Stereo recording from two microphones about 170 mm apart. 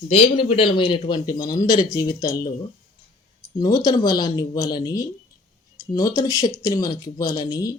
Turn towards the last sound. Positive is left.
turn(degrees=20)  # may be behind; listen again after turning